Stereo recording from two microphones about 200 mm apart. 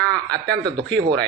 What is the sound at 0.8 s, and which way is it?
Speech, 60° right (ahead or behind).